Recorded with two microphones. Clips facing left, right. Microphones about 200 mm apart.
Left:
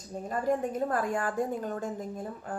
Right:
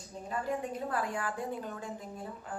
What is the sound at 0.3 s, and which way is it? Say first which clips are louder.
A woman's voice: left 6 dB; 45° left (ahead or behind).